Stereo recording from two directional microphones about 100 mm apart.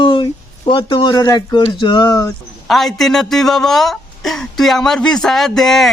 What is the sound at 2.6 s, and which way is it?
Speech, centre (ahead or behind).